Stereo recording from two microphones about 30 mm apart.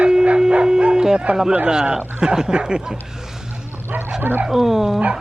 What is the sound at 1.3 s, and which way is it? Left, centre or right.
Speech, right.